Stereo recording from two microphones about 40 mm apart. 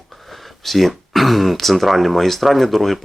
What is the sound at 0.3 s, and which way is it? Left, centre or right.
Speech, centre.